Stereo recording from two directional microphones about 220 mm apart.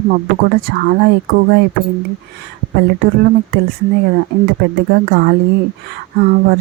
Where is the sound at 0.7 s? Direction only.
45° right (ahead or behind).